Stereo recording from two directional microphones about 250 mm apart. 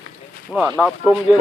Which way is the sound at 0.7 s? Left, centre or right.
Centre.